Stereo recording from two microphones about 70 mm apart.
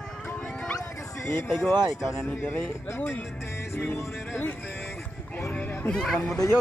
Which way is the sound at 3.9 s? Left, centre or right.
Centre.